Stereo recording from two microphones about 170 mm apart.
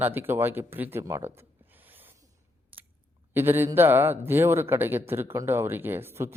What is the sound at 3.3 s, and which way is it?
A man's voice, 10° right (ahead or behind).